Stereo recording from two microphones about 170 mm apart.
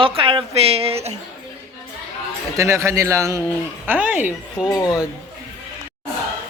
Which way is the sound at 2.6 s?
15° right (ahead or behind).